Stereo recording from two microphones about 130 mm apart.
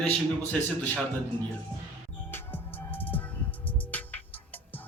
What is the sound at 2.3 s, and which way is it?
Music, 15° left (ahead or behind).